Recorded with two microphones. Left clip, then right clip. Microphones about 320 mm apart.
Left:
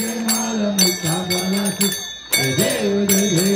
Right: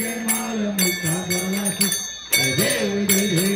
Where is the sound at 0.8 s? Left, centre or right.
Left.